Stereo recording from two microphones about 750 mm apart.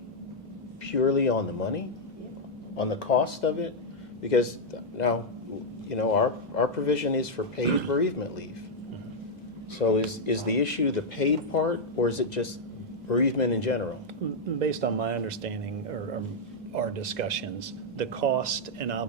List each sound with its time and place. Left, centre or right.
0.9 s speech: left
2.7 s speech: left
9.9 s speech: left
14.6 s speech: right
16.7 s speech: right